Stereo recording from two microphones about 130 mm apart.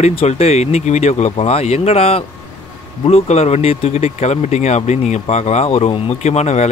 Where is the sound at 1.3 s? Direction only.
50° left (ahead or behind).